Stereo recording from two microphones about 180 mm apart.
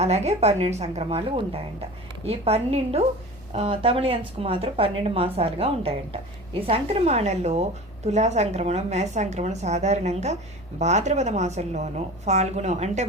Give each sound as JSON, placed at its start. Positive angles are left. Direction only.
{"t": 0.0, "sound": "speech", "side_deg": -35}